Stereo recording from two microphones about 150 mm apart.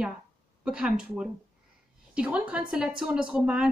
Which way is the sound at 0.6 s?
5° right (ahead or behind).